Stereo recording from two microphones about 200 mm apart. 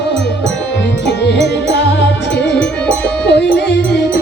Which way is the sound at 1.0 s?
60° left (ahead or behind).